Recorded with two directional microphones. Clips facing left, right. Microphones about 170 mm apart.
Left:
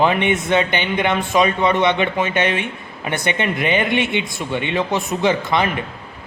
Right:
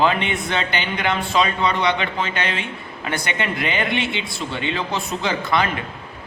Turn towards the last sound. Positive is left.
turn(degrees=20)  # may be behind; listen again after turning